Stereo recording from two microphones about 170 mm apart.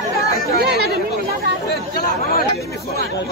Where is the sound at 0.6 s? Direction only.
70° right (ahead or behind).